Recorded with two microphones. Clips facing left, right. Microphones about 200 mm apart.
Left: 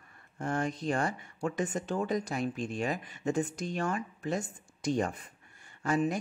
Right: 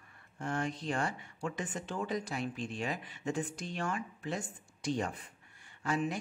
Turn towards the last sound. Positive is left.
turn(degrees=45)  # may be behind; listen again after turning